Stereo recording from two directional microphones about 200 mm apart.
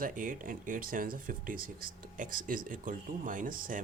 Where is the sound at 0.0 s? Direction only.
40° right (ahead or behind).